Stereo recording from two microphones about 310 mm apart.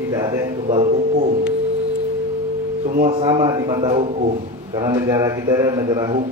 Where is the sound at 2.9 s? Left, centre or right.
Right.